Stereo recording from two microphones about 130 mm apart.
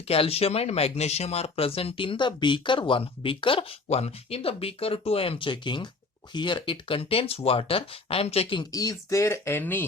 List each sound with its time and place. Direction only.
0.1 s speech: 50° left (ahead or behind)
8.7 s speech: 30° left (ahead or behind)